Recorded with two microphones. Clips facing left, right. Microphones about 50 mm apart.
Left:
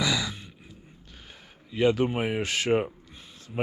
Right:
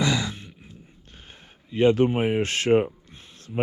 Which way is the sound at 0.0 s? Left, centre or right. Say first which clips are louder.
Right 3 dB; right.